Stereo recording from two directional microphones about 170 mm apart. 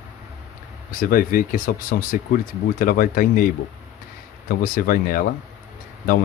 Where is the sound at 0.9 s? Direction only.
55° left (ahead or behind).